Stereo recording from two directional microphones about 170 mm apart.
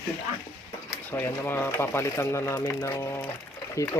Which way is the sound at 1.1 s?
10° left (ahead or behind).